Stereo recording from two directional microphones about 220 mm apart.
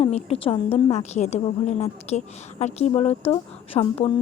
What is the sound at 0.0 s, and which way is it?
A woman's voice, 25° left (ahead or behind).